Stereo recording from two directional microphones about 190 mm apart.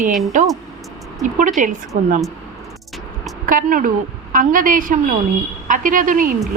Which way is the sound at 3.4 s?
45° right (ahead or behind).